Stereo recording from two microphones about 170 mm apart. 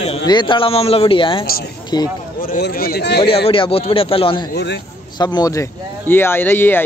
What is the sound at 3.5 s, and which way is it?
A man's voice, 35° left (ahead or behind).